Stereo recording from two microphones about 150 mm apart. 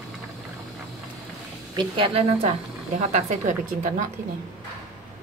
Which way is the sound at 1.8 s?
35° right (ahead or behind).